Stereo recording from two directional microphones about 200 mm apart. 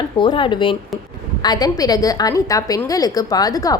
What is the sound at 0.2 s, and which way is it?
A woman's voice, 25° left (ahead or behind).